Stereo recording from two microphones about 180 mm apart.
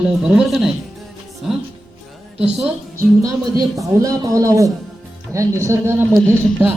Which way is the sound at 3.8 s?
20° right (ahead or behind).